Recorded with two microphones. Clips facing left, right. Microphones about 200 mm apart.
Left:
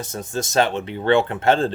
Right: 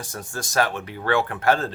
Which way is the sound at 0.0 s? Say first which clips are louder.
Left 6 dB; 20° left (ahead or behind).